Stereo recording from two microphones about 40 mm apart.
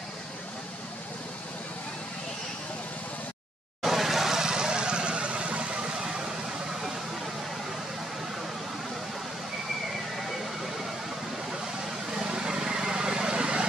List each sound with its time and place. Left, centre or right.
3.8 s vehicle: centre; by 5.9 s right
6.0 s vehicle: centre
12.1 s vehicle: centre